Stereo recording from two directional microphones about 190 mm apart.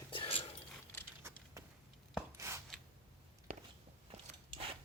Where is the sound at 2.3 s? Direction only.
15° right (ahead or behind).